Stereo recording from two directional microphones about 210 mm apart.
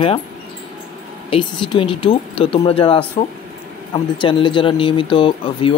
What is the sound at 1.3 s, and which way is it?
Speech, 25° left (ahead or behind).